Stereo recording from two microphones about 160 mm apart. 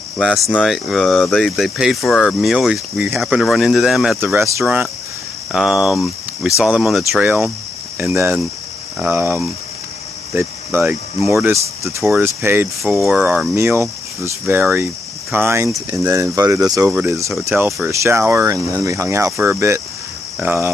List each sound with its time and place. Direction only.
0.2 s speech: centre (ahead or behind)
8.0 s speech: 15° right (ahead or behind); by 12.3 s centre (ahead or behind)
12.4 s speech: 15° right (ahead or behind)
12.8 s speech: centre (ahead or behind)
13.6 s speech: 15° right (ahead or behind)
17.3 s speech: centre (ahead or behind)
17.8 s speech: 15° right (ahead or behind)